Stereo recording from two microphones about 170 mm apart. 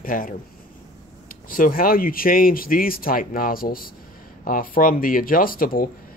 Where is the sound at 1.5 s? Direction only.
55° left (ahead or behind).